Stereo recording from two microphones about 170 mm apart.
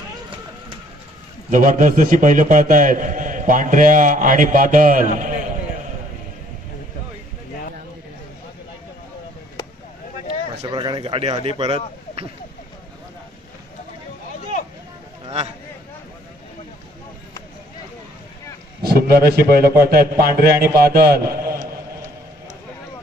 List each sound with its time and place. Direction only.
1.5 s a man's voice: 50° right (ahead or behind)
10.7 s a sound: 25° right (ahead or behind)
11.4 s speech: 35° right (ahead or behind)
18.8 s a man's voice: 65° right (ahead or behind)